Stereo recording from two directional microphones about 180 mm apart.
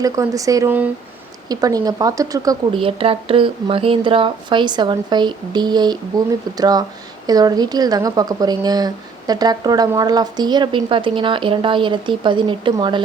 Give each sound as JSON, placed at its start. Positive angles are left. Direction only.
{"t": 0.0, "sound": "speech", "side_deg": -20}